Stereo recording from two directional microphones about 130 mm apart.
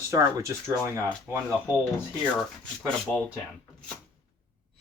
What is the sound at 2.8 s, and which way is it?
Speech, 5° left (ahead or behind).